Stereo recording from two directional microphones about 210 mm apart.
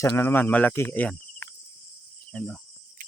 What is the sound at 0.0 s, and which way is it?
Speech, 10° left (ahead or behind).